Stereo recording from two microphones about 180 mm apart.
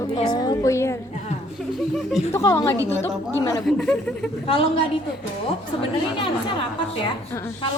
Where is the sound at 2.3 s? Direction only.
15° left (ahead or behind).